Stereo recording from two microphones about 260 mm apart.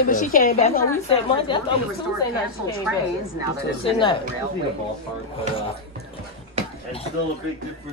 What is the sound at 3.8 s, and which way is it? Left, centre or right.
Speech, centre.